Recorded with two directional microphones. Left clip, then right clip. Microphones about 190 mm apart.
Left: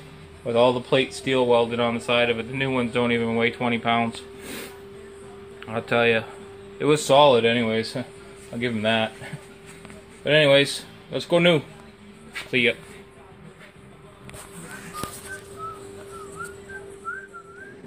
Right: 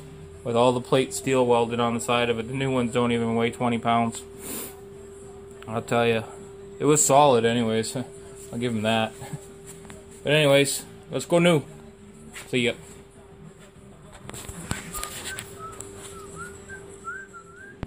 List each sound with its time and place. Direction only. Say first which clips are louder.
0.5 s speech: left 2 dB; centre (ahead or behind)
5.7 s speech: left 2 dB; centre (ahead or behind)